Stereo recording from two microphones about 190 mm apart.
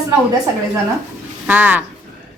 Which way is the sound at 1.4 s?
10° right (ahead or behind).